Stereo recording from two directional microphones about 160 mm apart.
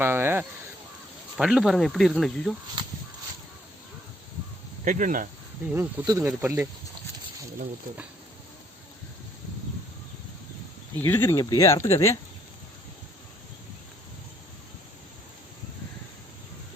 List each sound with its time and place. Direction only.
0.0 s speech: 15° right (ahead or behind)
1.4 s speech: 5° right (ahead or behind)
4.9 s speech: 55° right (ahead or behind)
5.7 s speech: 15° right (ahead or behind)
11.0 s speech: 15° left (ahead or behind)